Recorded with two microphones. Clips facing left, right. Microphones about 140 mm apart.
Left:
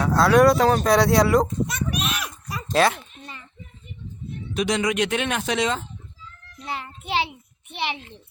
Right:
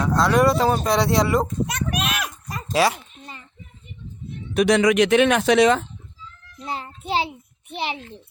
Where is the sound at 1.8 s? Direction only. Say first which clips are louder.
Right 2 dB; 50° right (ahead or behind).